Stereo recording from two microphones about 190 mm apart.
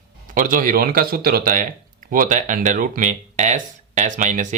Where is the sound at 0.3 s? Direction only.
45° right (ahead or behind).